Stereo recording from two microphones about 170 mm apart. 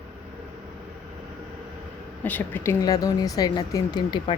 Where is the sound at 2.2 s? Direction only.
10° left (ahead or behind).